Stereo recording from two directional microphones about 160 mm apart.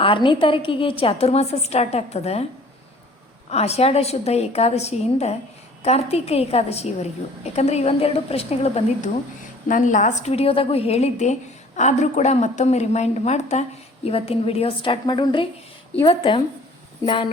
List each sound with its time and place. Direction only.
0.0 s a woman's voice: 30° left (ahead or behind)
3.5 s a woman's voice: 40° left (ahead or behind)
9.6 s a woman's voice: 55° left (ahead or behind); by 16.4 s 35° left (ahead or behind)